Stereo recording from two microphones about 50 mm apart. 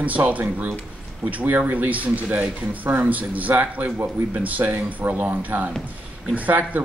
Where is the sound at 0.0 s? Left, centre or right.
Right.